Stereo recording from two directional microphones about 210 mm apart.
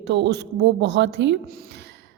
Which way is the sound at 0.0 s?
55° right (ahead or behind).